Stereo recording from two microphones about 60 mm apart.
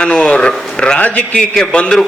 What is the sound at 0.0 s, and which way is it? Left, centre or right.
A man's voice, centre.